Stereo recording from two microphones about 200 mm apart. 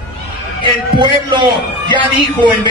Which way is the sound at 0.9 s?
25° right (ahead or behind).